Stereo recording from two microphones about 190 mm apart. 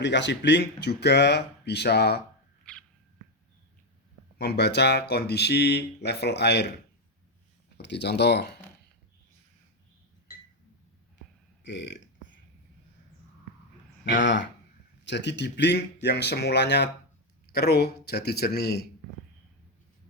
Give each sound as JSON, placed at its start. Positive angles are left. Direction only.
{"t": 0.0, "sound": "speech", "side_deg": 65}
{"t": 4.4, "sound": "speech", "side_deg": 60}
{"t": 7.8, "sound": "speech", "side_deg": 65}
{"t": 11.6, "sound": "speech", "side_deg": 70}
{"t": 14.0, "sound": "speech", "side_deg": 70}